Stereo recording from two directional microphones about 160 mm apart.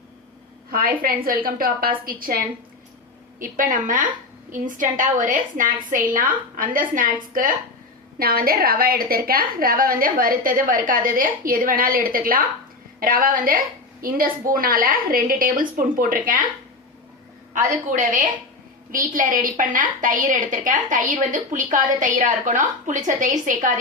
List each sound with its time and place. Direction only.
0.7 s a woman's voice: 65° right (ahead or behind)
3.4 s a woman's voice: 60° right (ahead or behind)
17.5 s a woman's voice: 50° right (ahead or behind)